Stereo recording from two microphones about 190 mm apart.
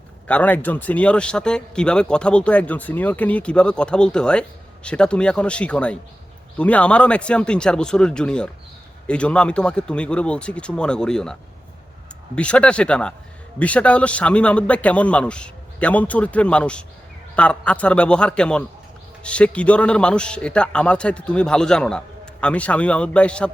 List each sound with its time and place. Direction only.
0.3 s speech: 10° left (ahead or behind)
12.4 s speech: 5° left (ahead or behind)